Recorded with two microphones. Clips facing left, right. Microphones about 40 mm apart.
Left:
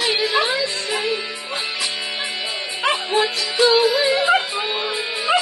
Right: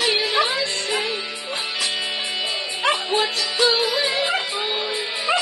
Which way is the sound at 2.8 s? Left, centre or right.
Left.